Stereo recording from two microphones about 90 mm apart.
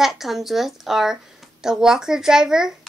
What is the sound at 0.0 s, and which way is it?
A woman's voice, 5° right (ahead or behind).